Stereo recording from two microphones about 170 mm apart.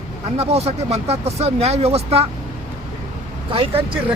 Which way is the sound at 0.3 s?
40° right (ahead or behind).